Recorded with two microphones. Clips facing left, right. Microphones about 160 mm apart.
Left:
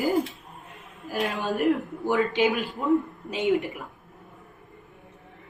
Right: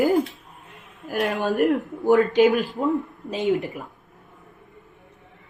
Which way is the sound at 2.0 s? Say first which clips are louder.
Right 6 dB; 45° right (ahead or behind).